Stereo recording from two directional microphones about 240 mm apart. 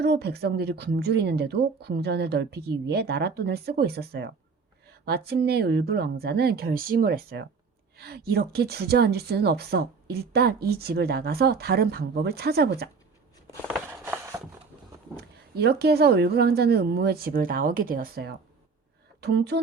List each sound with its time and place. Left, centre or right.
0.0 s a woman's voice: right
13.7 s a sound: centre
15.1 s a woman's voice: right